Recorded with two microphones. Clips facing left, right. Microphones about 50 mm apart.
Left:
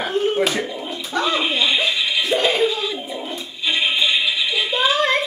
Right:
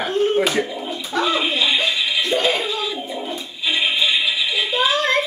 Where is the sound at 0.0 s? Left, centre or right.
Centre.